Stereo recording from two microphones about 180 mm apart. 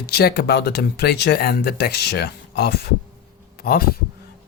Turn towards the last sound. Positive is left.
turn(degrees=55)  # may be behind; listen again after turning